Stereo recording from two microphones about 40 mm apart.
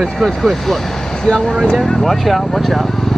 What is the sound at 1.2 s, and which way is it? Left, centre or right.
Speech, centre.